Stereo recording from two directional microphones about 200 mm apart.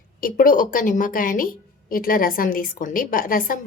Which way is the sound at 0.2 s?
45° left (ahead or behind).